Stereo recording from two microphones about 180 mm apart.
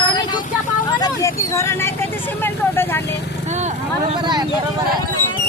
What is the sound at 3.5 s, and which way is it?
Speech, 40° right (ahead or behind).